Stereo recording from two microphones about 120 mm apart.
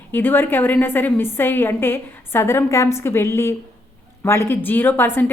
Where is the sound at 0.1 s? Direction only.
15° left (ahead or behind).